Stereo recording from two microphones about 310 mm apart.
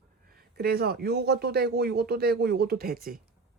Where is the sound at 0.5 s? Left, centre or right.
Right.